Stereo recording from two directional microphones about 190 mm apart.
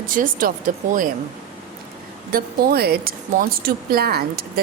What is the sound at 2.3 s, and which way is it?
Speech, 50° right (ahead or behind).